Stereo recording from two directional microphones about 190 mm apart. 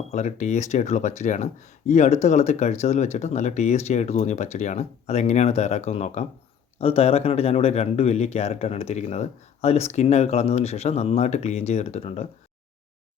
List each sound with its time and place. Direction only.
0.1 s speech: 35° left (ahead or behind)